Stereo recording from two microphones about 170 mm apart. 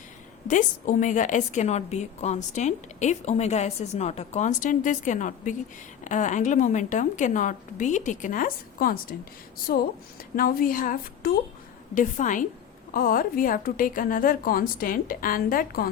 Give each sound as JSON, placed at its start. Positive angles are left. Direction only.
{"t": 0.4, "sound": "a woman's voice", "side_deg": 50}
{"t": 10.3, "sound": "a woman's voice", "side_deg": 60}